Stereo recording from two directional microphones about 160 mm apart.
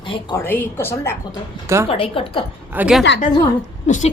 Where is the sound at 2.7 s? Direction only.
5° right (ahead or behind).